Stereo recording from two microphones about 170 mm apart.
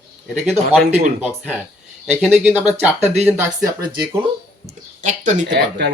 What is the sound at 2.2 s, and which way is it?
Speech, 5° right (ahead or behind).